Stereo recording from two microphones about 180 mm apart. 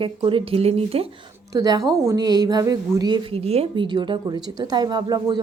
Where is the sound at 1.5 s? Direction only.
20° right (ahead or behind).